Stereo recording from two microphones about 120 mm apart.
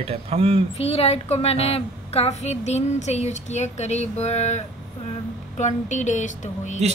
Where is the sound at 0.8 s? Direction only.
55° left (ahead or behind).